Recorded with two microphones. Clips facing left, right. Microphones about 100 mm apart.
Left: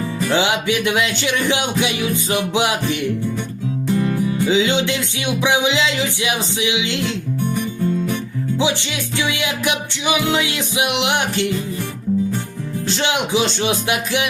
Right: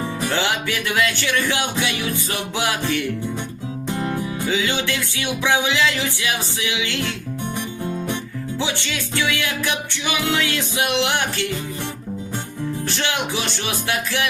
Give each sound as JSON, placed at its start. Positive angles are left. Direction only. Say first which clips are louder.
{"t": 0.3, "sound": "speech", "louder": "left 6 dB", "side_deg": 20}
{"t": 3.8, "sound": "music", "louder": "left 5 dB", "side_deg": -20}
{"t": 4.4, "sound": "speech", "louder": "left 5 dB", "side_deg": 20}
{"t": 8.5, "sound": "music", "louder": "left 5 dB", "side_deg": 15}
{"t": 12.9, "sound": "music", "louder": "left 8 dB", "side_deg": 20}